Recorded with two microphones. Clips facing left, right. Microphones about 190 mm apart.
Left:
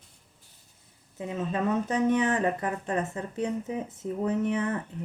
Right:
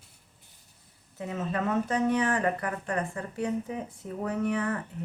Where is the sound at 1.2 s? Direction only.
20° left (ahead or behind).